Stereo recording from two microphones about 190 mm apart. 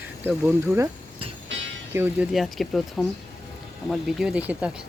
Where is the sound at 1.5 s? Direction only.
75° right (ahead or behind).